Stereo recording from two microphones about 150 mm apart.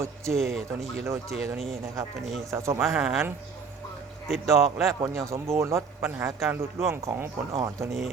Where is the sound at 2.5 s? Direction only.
20° right (ahead or behind).